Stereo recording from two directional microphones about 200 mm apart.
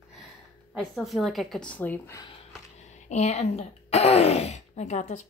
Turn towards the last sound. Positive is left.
turn(degrees=35)  # may be behind; listen again after turning